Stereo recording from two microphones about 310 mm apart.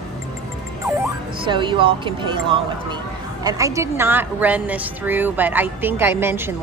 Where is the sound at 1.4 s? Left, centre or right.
Centre.